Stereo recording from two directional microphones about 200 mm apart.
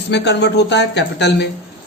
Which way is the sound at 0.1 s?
60° left (ahead or behind).